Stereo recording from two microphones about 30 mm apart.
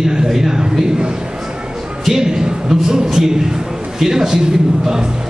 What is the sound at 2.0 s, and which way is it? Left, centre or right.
Speech, centre.